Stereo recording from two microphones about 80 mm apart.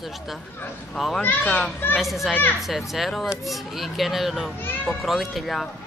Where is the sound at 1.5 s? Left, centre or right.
Left.